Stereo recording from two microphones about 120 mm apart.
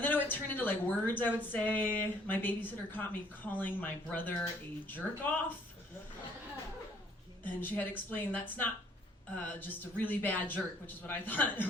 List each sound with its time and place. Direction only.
0.0 s a woman's voice: 15° left (ahead or behind)
7.6 s a woman's voice: 15° left (ahead or behind)